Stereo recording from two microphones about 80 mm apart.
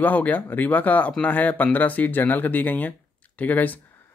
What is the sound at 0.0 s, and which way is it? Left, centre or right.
Speech, left.